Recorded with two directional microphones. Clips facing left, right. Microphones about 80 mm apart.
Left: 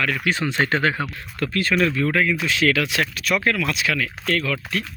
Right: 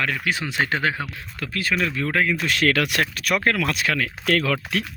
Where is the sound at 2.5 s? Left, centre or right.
Right.